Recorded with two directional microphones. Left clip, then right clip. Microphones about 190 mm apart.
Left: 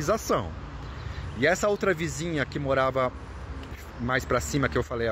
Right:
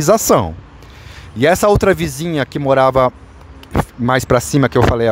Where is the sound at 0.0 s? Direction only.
60° right (ahead or behind).